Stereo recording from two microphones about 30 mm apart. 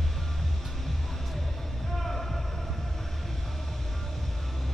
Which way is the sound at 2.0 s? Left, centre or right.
Centre.